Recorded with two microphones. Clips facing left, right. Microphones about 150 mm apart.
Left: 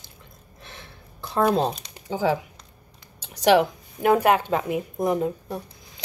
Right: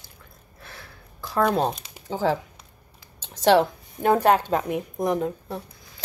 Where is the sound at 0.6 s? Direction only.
20° left (ahead or behind).